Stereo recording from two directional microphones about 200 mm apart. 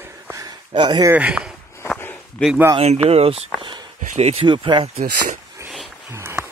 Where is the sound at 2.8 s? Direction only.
35° right (ahead or behind).